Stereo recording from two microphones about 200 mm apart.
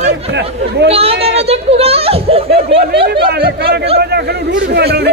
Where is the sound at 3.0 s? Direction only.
50° right (ahead or behind).